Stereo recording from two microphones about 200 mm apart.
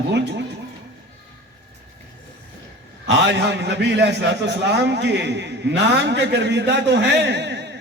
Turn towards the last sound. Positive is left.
turn(degrees=-60)  # may be behind; listen again after turning